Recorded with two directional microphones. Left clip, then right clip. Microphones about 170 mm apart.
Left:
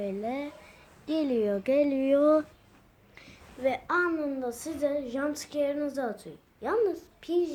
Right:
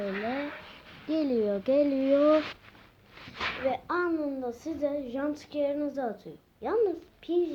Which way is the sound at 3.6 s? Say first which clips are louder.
Left 4 dB; 25° left (ahead or behind).